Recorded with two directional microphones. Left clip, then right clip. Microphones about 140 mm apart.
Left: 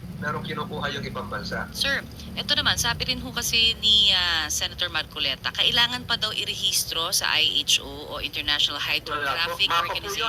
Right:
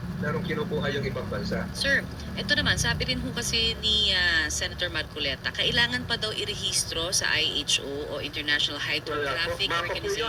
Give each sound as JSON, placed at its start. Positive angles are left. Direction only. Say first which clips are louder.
{"t": 0.3, "sound": "a woman's voice", "louder": "even", "side_deg": 45}